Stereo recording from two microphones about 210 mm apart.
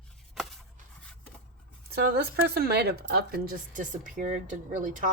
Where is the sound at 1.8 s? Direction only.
50° right (ahead or behind).